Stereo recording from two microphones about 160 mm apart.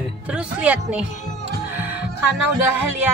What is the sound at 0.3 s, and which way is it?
Speech, 5° right (ahead or behind).